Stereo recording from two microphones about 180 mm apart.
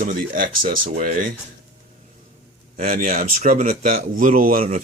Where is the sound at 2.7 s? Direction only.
50° right (ahead or behind).